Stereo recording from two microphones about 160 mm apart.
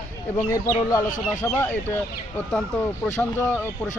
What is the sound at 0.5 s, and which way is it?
Speech, 20° left (ahead or behind).